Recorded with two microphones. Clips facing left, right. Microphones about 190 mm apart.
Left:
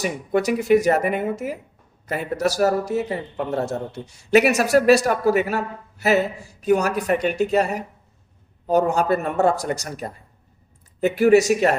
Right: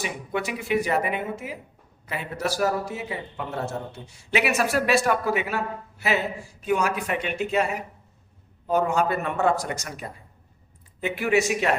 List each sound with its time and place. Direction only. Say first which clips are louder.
0.0 s a man's voice: left 7 dB; 40° left (ahead or behind)